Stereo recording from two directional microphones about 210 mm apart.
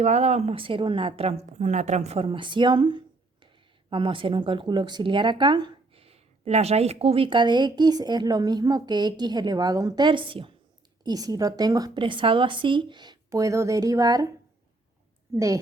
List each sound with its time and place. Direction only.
0.0 s a woman's voice: 35° right (ahead or behind); by 14.3 s 15° right (ahead or behind)